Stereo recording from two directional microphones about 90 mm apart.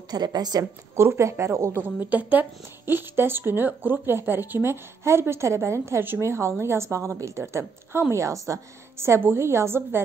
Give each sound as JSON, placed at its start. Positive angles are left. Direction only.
{"t": 0.1, "sound": "a woman's voice", "side_deg": -50}
{"t": 0.9, "sound": "speech", "side_deg": -30}